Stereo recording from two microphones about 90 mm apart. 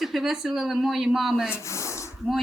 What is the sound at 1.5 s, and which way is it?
Speech, 35° left (ahead or behind).